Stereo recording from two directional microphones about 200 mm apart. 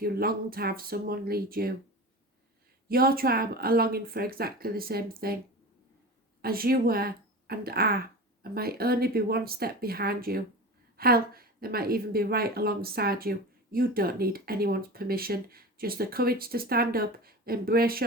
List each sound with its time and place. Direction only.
0.0 s a woman's voice: 50° right (ahead or behind)
2.9 s a woman's voice: 50° right (ahead or behind)
6.4 s a woman's voice: 50° right (ahead or behind)